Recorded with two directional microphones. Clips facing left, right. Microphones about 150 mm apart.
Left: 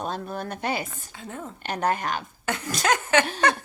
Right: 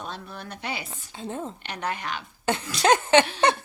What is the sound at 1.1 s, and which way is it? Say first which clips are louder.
Speech: right 4 dB; 25° right (ahead or behind).